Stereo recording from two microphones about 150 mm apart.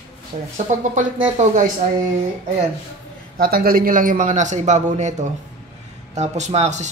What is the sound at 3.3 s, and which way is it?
Speech, 80° right.